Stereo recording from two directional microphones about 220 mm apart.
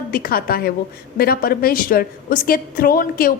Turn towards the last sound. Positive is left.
turn(degrees=40)  # may be behind; listen again after turning